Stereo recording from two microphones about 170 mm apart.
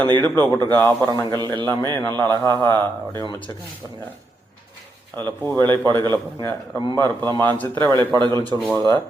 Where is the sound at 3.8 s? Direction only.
10° left (ahead or behind).